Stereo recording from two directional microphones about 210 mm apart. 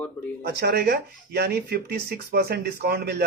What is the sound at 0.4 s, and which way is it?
Speech, 50° right (ahead or behind).